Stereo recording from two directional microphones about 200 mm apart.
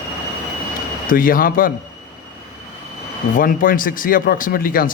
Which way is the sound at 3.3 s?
45° left (ahead or behind).